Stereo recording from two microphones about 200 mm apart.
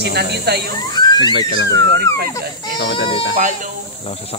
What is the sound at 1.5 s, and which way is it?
Speech, 55° left (ahead or behind).